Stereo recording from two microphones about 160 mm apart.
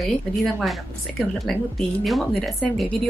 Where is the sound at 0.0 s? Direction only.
Centre (ahead or behind).